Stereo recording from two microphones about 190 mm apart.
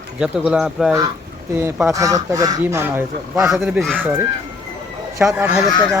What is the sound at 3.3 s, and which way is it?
Speech, 5° right (ahead or behind).